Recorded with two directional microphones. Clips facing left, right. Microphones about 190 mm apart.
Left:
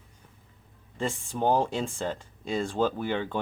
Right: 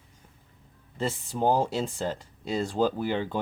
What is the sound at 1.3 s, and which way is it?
Speech, 10° right (ahead or behind).